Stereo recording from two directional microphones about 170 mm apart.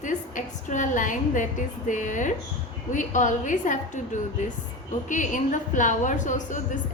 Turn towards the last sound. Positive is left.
turn(degrees=45)  # may be behind; listen again after turning